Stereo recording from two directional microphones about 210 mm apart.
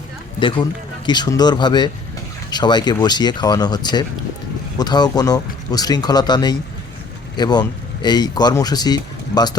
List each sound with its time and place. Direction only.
0.3 s speech: 25° left (ahead or behind)